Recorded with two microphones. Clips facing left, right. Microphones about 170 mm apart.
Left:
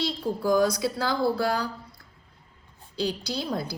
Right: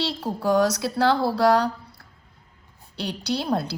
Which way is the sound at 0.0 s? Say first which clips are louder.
Right 1 dB; 70° right (ahead or behind).